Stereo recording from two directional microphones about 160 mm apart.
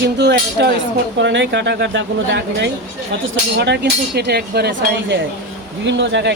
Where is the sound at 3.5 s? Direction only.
90° right.